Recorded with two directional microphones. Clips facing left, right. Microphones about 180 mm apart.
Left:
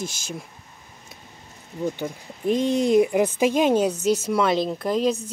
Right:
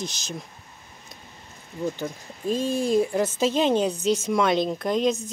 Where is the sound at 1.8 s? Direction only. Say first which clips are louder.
Left 2 dB; 15° left (ahead or behind).